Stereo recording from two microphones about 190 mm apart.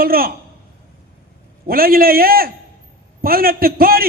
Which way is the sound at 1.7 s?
50° right (ahead or behind).